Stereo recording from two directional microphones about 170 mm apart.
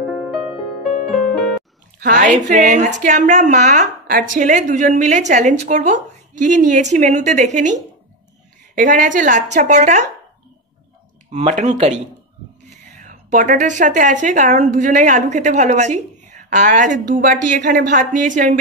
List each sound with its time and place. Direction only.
0.0 s music: 5° right (ahead or behind)
2.0 s a woman's voice: 50° right (ahead or behind)
11.2 s speech: 40° right (ahead or behind)
12.6 s a sound: 45° right (ahead or behind)
14.2 s a woman's voice: 45° right (ahead or behind)